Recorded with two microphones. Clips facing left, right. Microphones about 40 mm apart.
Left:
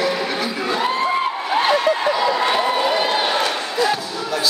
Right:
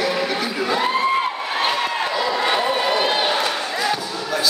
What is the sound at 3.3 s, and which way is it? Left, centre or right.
Basketball bounce, centre.